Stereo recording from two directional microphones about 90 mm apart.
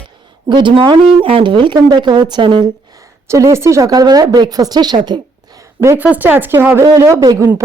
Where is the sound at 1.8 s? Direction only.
55° right (ahead or behind).